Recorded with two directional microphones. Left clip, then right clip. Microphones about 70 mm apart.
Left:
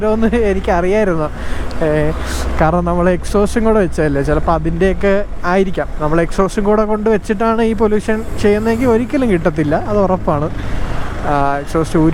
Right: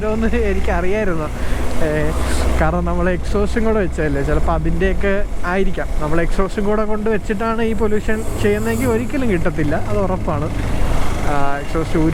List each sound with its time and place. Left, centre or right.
0.0 s speech: left
3.3 s speech: left
7.1 s speech: left